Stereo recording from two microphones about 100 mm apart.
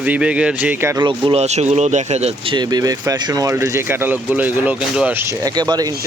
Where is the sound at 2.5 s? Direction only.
45° right (ahead or behind).